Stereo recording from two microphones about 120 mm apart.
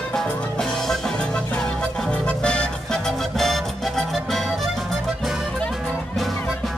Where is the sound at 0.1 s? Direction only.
5° left (ahead or behind).